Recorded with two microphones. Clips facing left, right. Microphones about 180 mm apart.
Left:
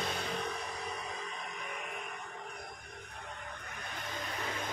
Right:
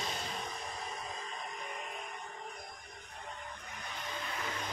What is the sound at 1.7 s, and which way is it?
Music, 65° left (ahead or behind).